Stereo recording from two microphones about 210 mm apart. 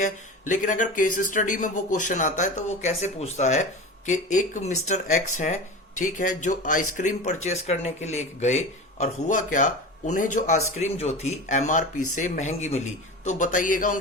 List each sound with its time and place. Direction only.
0.0 s speech: 35° left (ahead or behind)